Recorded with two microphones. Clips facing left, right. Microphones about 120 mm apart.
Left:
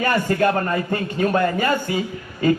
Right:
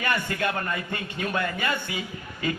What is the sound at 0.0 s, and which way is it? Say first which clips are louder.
Speech: left 8 dB; 40° left (ahead or behind).